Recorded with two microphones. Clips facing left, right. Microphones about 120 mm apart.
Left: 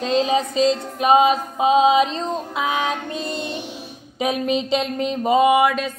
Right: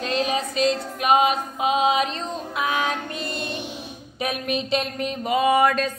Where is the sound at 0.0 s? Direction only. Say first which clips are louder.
Left 5 dB; 25° left (ahead or behind).